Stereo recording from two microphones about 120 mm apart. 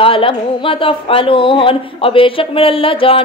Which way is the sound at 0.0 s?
50° left (ahead or behind).